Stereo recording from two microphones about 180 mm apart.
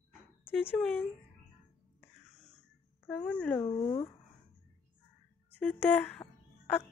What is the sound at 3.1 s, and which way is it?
Speech, 5° left (ahead or behind).